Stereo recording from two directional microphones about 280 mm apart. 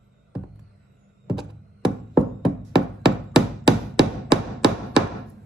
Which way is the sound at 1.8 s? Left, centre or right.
Centre.